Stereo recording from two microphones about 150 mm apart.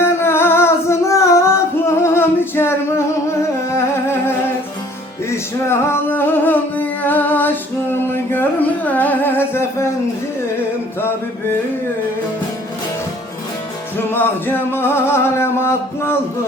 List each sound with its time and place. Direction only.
0.0 s singing: 15° left (ahead or behind)
3.8 s music: 15° left (ahead or behind)
14.1 s music: 15° left (ahead or behind)